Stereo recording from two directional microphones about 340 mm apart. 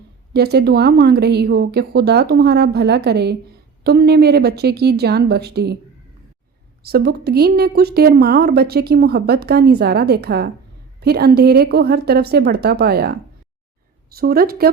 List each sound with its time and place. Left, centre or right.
0.3 s speech: right
6.8 s speech: right
14.2 s speech: right